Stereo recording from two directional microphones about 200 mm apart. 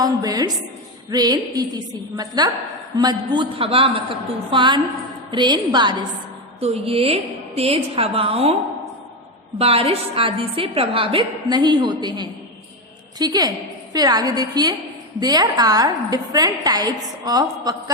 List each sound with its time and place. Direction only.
0.0 s a sound: 20° right (ahead or behind)
1.1 s a woman's voice: 20° right (ahead or behind)
9.6 s a woman's voice: 30° right (ahead or behind)